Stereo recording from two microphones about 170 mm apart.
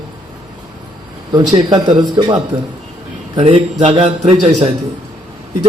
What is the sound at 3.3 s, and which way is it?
Speech, 35° right (ahead or behind).